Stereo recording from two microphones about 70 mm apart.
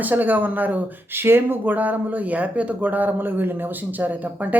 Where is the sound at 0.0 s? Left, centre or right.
Right.